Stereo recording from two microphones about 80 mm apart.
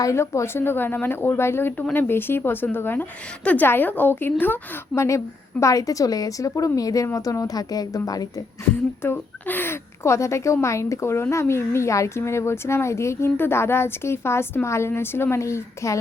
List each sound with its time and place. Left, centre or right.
0.0 s a woman's voice: left
4.9 s a woman's voice: left
8.6 s speech: left